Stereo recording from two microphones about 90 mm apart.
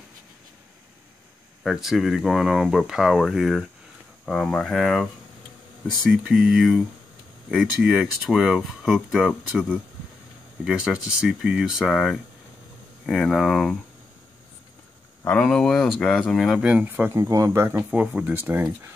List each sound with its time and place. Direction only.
1.6 s speech: centre (ahead or behind)
6.0 s speech: 5° right (ahead or behind)
10.6 s speech: 10° right (ahead or behind)
11.8 s speech: centre (ahead or behind)
15.2 s speech: 10° left (ahead or behind)
16.6 s speech: 15° right (ahead or behind)
17.2 s speech: 35° right (ahead or behind)